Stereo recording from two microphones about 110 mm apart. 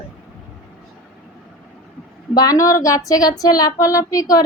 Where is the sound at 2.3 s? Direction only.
35° left (ahead or behind).